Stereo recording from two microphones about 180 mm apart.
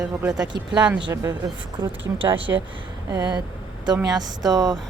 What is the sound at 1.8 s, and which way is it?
Speech, 30° right (ahead or behind).